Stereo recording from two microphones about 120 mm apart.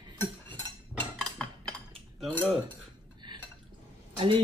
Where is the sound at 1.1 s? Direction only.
5° left (ahead or behind).